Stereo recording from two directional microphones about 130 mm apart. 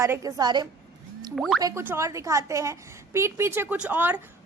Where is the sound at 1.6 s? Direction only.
20° right (ahead or behind).